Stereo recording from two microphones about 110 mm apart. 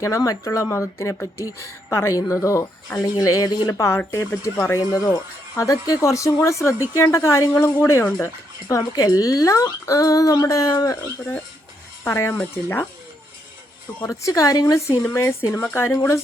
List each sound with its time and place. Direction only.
0.0 s speech: 30° left (ahead or behind)
3.7 s speech: 25° left (ahead or behind)
8.6 s speech: 35° left (ahead or behind)
12.0 s speech: 25° left (ahead or behind)
14.1 s speech: 30° left (ahead or behind)